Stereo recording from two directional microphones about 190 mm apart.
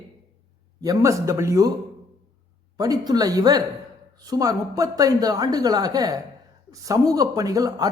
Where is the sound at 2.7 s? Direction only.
20° right (ahead or behind).